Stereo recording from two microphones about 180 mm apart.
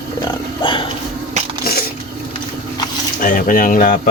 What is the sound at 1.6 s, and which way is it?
Crushing, 60° left (ahead or behind).